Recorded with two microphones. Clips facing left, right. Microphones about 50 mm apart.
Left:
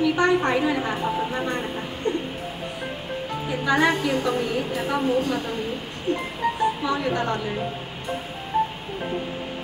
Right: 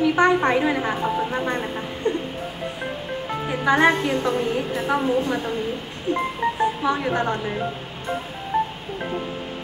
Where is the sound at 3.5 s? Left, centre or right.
Right.